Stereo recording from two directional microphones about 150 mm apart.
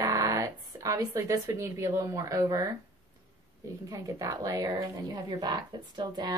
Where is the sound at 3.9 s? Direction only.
20° right (ahead or behind).